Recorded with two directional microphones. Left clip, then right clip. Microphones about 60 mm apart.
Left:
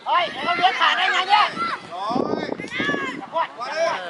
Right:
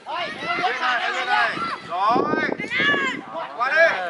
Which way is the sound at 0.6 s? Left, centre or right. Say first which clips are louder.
Left 5 dB; left.